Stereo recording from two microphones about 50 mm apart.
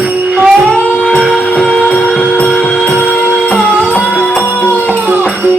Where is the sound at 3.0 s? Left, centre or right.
Left.